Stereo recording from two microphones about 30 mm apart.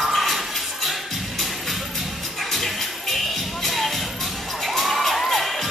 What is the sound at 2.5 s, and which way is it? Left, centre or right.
Music, centre.